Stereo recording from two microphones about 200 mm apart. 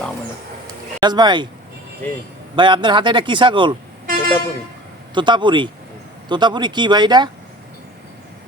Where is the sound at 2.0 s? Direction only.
10° left (ahead or behind).